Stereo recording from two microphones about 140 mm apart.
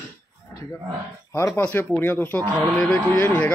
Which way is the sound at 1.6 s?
10° left (ahead or behind).